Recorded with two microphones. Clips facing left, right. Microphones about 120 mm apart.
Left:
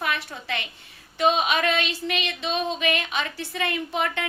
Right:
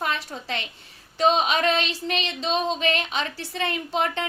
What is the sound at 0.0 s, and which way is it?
A woman's voice, 35° right (ahead or behind).